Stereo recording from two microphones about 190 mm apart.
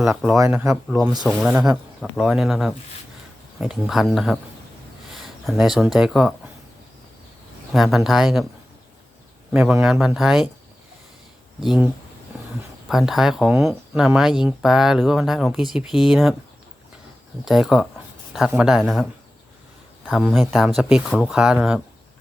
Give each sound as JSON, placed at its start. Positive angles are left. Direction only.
{"t": 0.2, "sound": "speech", "side_deg": -15}
{"t": 1.2, "sound": "speech", "side_deg": 5}
{"t": 7.7, "sound": "speech", "side_deg": 0}
{"t": 9.5, "sound": "speech", "side_deg": -5}
{"t": 11.6, "sound": "speech", "side_deg": 0}
{"t": 12.9, "sound": "speech", "side_deg": 0}
{"t": 17.4, "sound": "speech", "side_deg": 0}
{"t": 20.1, "sound": "speech", "side_deg": 0}